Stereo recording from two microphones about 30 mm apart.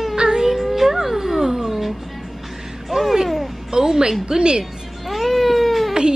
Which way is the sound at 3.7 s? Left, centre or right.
Right.